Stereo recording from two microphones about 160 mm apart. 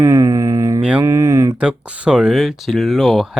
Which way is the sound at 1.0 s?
20° right (ahead or behind).